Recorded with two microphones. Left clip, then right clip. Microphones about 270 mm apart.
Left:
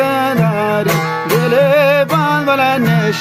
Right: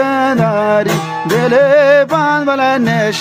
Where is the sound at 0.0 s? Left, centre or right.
Right.